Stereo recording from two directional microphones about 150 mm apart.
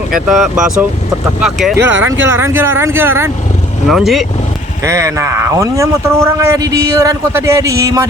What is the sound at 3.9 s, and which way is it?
Speech, centre (ahead or behind).